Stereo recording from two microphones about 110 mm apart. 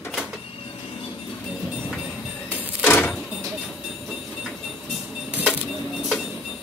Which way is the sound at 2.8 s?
15° left (ahead or behind).